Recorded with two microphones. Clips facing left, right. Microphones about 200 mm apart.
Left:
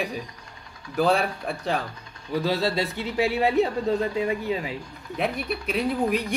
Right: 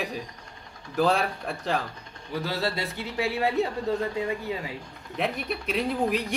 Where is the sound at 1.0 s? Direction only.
5° left (ahead or behind).